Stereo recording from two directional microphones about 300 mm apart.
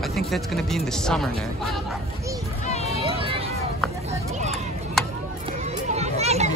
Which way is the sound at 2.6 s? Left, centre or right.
Left.